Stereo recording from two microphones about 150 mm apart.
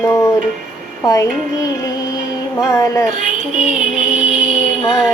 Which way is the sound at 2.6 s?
20° left (ahead or behind).